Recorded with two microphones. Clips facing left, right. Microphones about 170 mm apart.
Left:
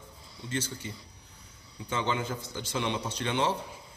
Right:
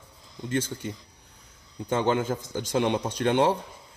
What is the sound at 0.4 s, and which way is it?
A man's voice, 50° right (ahead or behind).